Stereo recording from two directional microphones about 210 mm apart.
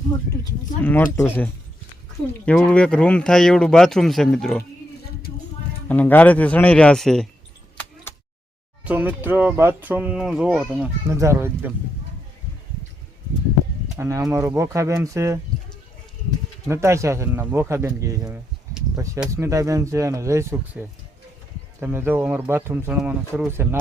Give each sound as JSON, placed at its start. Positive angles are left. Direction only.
{"t": 0.8, "sound": "speech", "side_deg": 10}
{"t": 2.5, "sound": "speech", "side_deg": 5}
{"t": 5.9, "sound": "speech", "side_deg": 10}
{"t": 8.8, "sound": "speech", "side_deg": -10}
{"t": 14.0, "sound": "speech", "side_deg": -15}
{"t": 16.6, "sound": "speech", "side_deg": -10}